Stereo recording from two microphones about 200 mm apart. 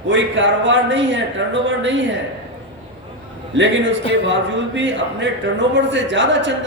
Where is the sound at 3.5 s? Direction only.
65° right (ahead or behind).